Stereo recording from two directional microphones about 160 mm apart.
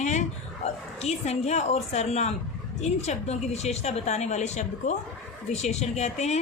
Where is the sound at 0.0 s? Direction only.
50° left (ahead or behind).